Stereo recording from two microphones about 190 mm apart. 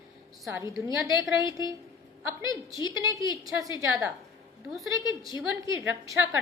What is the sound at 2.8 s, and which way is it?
Speech, 15° right (ahead or behind).